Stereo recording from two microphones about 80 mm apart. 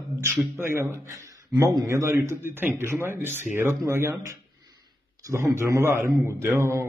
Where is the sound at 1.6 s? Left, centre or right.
Right.